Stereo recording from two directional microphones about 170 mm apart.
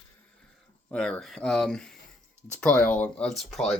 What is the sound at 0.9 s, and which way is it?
Speech, 5° left (ahead or behind).